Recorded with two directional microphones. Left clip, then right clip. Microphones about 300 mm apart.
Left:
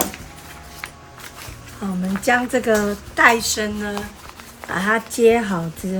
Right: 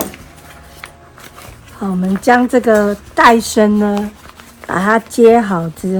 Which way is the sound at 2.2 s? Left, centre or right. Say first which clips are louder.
Right 7 dB; centre.